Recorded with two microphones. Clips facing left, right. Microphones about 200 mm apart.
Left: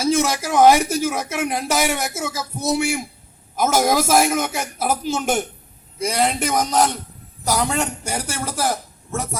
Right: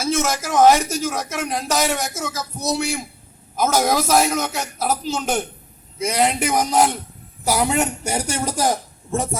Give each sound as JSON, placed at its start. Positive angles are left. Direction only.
{"t": 0.0, "sound": "a man's voice", "side_deg": 10}
{"t": 6.1, "sound": "a man's voice", "side_deg": -5}
{"t": 7.5, "sound": "a woman's voice", "side_deg": -15}